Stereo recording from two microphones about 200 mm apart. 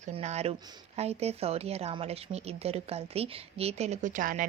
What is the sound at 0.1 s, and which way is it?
Speech, 35° right (ahead or behind).